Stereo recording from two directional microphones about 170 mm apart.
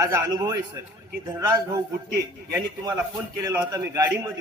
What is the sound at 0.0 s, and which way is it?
A man's voice, 20° right (ahead or behind).